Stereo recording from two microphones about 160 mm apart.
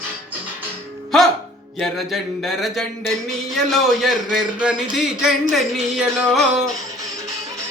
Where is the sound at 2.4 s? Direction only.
Centre (ahead or behind).